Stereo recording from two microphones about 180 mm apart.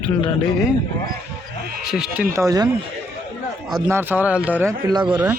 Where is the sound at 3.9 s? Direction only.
10° right (ahead or behind).